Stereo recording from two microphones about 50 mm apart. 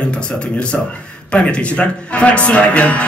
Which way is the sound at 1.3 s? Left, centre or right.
Left.